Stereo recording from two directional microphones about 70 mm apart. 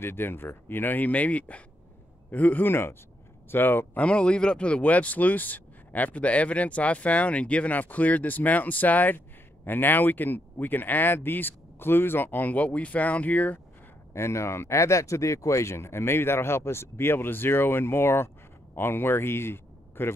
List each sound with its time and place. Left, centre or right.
0.0 s speech: left
4.0 s speech: centre
14.1 s speech: left